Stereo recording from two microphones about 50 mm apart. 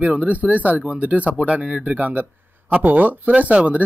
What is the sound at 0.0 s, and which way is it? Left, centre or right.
Speech, right.